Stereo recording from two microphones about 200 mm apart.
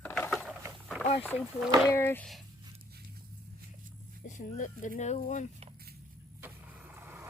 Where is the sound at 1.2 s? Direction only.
10° left (ahead or behind).